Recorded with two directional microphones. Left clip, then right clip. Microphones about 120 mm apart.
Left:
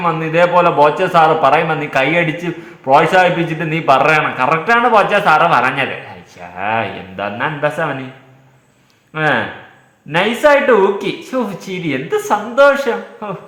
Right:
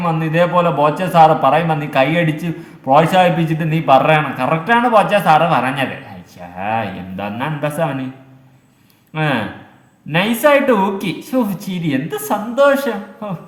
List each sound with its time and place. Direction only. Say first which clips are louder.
0.0 s a man's voice: left 3 dB; 15° right (ahead or behind)
9.1 s speech: left 4 dB; 20° right (ahead or behind)